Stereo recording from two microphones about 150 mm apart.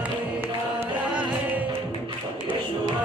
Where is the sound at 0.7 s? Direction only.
15° right (ahead or behind).